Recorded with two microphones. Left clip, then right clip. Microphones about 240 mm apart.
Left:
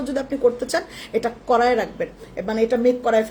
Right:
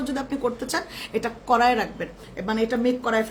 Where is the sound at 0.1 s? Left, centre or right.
Centre.